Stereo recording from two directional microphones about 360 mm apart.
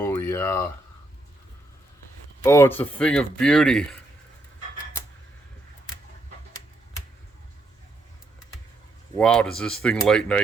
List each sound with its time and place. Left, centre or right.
0.0 s a sound: centre
2.4 s a man's voice: centre
9.1 s a man's voice: centre